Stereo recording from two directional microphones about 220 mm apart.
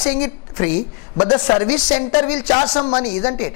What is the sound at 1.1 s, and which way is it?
A man's voice, 25° left (ahead or behind).